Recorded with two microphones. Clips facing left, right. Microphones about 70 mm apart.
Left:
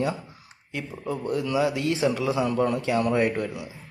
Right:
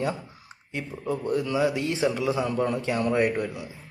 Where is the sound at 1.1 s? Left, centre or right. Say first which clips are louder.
Right 1 dB; right.